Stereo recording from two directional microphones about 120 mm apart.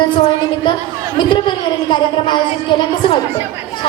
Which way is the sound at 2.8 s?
40° left (ahead or behind).